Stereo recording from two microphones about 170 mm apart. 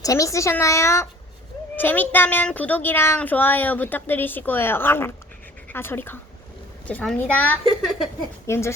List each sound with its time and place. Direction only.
0.0 s a child's voice: 20° left (ahead or behind)
7.9 s speech: 5° right (ahead or behind)
8.4 s a child's voice: 15° left (ahead or behind)